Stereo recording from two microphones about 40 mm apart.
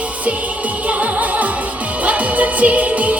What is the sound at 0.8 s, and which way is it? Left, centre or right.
Music, right.